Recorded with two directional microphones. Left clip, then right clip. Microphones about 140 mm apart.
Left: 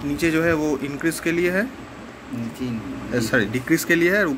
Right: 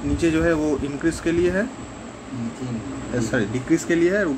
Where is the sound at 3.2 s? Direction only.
20° left (ahead or behind).